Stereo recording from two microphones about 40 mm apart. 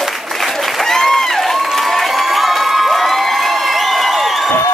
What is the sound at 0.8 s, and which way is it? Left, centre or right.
Crowd, centre.